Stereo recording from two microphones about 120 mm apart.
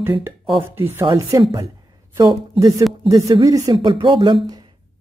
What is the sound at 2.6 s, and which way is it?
Speech, 30° right (ahead or behind).